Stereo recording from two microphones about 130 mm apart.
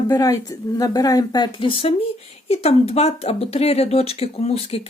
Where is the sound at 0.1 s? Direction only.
30° left (ahead or behind).